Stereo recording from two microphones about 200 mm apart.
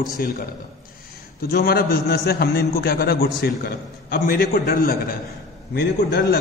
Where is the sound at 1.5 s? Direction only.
50° left (ahead or behind).